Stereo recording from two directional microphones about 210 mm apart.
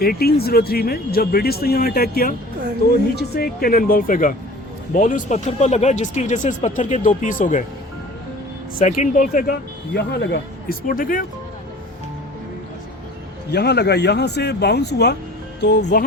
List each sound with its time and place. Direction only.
0.0 s speech: 45° left (ahead or behind)
8.8 s speech: 35° left (ahead or behind)
13.5 s speech: 50° left (ahead or behind)